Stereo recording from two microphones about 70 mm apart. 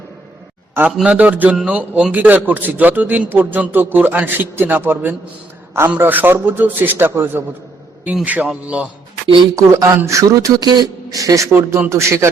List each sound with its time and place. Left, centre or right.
0.9 s speech: centre
1.2 s a man's voice: right
8.1 s speech: right
9.6 s speech: right
10.6 s speech: right
11.2 s speech: right
11.5 s speech: right